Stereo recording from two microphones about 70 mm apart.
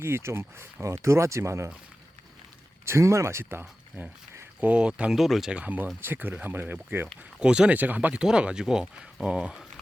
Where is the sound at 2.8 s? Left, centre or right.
Right.